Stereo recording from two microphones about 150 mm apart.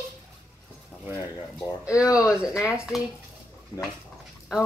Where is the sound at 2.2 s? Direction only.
5° right (ahead or behind).